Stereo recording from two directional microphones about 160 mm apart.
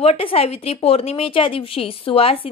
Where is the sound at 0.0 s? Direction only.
35° left (ahead or behind).